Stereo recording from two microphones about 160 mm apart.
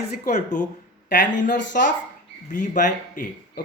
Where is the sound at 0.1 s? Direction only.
50° left (ahead or behind).